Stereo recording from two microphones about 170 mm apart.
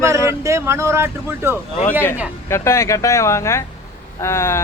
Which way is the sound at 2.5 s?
15° left (ahead or behind).